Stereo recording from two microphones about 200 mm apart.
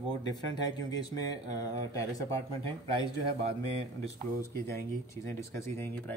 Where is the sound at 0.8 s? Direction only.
20° left (ahead or behind).